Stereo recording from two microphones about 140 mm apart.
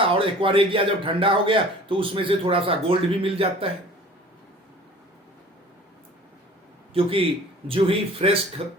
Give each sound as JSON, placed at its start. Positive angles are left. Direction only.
{"t": 0.0, "sound": "speech", "side_deg": -40}
{"t": 6.9, "sound": "speech", "side_deg": -40}